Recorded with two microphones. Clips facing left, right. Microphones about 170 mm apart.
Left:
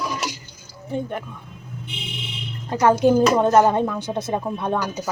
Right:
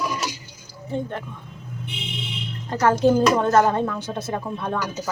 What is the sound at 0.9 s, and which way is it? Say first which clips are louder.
Speech: left 1 dB; 15° left (ahead or behind).